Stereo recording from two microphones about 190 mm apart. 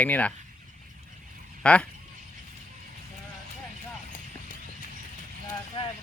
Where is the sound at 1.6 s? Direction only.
5° left (ahead or behind).